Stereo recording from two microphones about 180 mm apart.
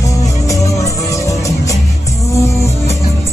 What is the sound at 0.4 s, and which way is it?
Music, 15° left (ahead or behind).